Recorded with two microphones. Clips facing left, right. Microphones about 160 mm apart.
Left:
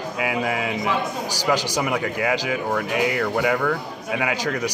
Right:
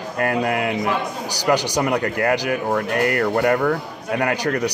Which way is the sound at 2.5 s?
15° left (ahead or behind).